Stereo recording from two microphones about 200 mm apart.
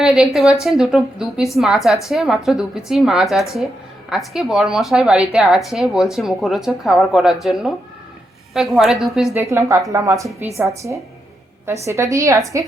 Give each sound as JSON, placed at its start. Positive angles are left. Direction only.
{"t": 0.0, "sound": "speech", "side_deg": 0}
{"t": 9.3, "sound": "a woman's voice", "side_deg": -15}